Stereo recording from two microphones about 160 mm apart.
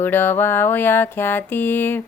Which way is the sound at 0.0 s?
15° left (ahead or behind).